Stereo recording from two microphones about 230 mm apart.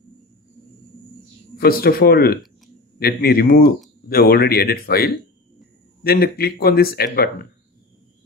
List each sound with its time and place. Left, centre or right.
1.6 s speech: left